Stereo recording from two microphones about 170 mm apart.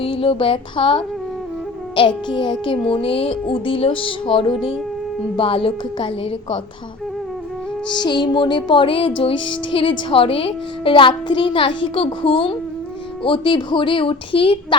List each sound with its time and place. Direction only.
0.0 s music: 30° left (ahead or behind)
7.9 s a woman's voice: 25° left (ahead or behind)
9.7 s music: 35° left (ahead or behind)
13.2 s a woman's voice: 30° left (ahead or behind)